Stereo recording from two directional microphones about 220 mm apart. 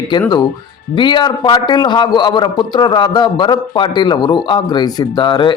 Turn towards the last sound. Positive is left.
turn(degrees=20)  # may be behind; listen again after turning